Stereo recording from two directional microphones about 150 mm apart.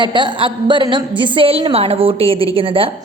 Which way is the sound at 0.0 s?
30° right (ahead or behind).